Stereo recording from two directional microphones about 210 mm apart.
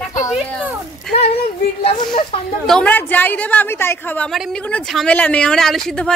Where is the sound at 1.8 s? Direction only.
25° left (ahead or behind).